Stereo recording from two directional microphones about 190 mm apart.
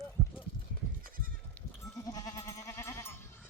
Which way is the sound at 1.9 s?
20° left (ahead or behind).